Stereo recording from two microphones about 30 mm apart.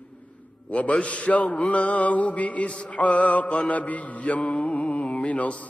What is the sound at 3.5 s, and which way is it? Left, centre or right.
Mantra, left.